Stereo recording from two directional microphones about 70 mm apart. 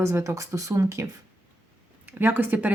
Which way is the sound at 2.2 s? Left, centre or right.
Right.